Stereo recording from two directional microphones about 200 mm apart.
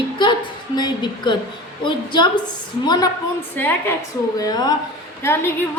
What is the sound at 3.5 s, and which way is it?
A woman's voice, 10° left (ahead or behind).